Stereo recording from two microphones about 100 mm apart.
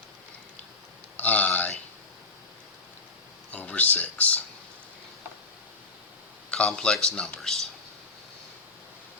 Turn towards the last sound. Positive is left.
turn(degrees=10)  # may be behind; listen again after turning